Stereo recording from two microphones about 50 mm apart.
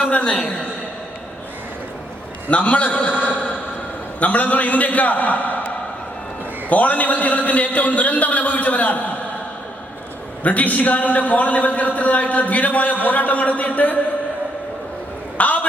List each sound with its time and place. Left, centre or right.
0.0 s a woman's voice: left
2.5 s a man's voice: left
4.2 s a man's voice: left
10.4 s a man's voice: left
15.4 s a man's voice: left